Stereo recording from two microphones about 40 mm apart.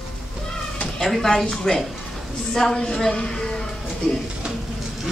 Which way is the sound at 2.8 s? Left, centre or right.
Centre.